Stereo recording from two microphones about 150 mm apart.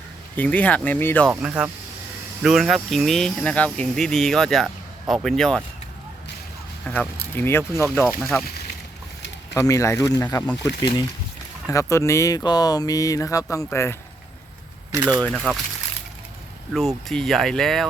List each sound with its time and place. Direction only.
0.3 s speech: 10° left (ahead or behind)
1.3 s speech: 10° right (ahead or behind)
6.9 s speech: 10° left (ahead or behind)
9.6 s speech: 20° left (ahead or behind)
14.9 s speech: 20° right (ahead or behind)
15.5 s speech: 10° left (ahead or behind)
16.7 s speech: centre (ahead or behind)